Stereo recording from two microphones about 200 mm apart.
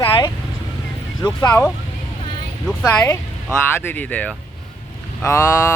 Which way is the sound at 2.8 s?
10° left (ahead or behind).